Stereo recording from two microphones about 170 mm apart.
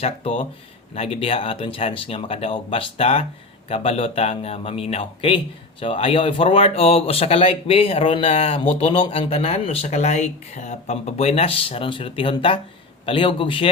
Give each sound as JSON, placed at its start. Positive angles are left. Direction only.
{"t": 0.0, "sound": "speech", "side_deg": 35}